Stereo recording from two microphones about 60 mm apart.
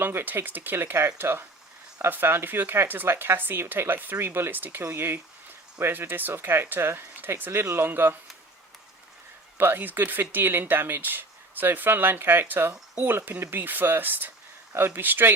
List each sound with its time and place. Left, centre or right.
0.0 s speech: right
9.6 s speech: right